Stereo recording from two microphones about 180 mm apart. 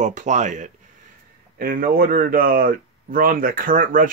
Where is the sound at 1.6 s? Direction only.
55° right (ahead or behind).